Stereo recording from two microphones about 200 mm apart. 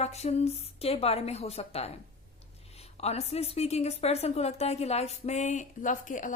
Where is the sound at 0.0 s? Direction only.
35° left (ahead or behind).